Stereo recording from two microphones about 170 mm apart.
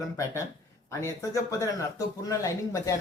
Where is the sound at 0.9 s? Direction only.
20° left (ahead or behind).